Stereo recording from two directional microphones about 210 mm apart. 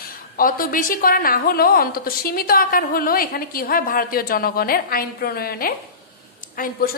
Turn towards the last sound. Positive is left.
turn(degrees=45)  # may be behind; listen again after turning